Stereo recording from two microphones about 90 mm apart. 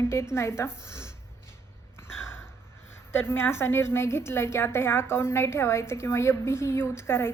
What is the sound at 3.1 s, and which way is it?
A woman's voice, 25° left (ahead or behind).